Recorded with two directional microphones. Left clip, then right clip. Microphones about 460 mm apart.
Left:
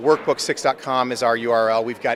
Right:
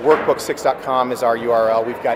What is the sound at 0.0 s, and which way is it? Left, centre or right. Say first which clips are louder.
Speech: right 3 dB; left.